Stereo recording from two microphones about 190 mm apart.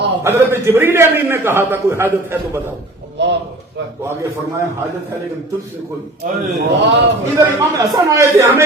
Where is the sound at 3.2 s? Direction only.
65° right (ahead or behind).